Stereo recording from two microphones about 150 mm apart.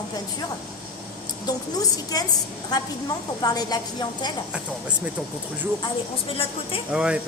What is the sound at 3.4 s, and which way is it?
Speech, 25° left (ahead or behind).